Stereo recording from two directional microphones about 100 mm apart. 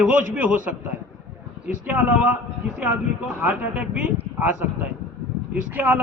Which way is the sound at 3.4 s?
10° right (ahead or behind).